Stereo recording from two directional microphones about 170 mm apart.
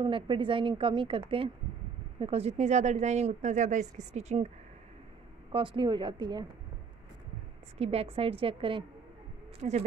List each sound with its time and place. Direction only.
0.0 s speech: 30° right (ahead or behind)
5.5 s a woman's voice: 30° right (ahead or behind)
7.7 s speech: 35° right (ahead or behind)
9.6 s speech: 40° right (ahead or behind)